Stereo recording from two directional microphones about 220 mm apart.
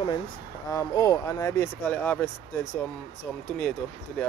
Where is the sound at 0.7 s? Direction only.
15° left (ahead or behind).